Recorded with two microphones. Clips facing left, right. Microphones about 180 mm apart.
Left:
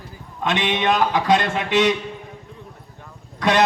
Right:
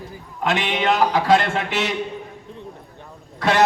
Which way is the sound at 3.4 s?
15° left (ahead or behind).